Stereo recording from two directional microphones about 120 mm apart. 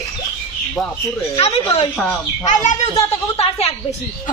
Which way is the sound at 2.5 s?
90° left.